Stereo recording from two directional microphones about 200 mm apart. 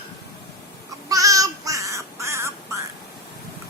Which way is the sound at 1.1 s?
15° right (ahead or behind).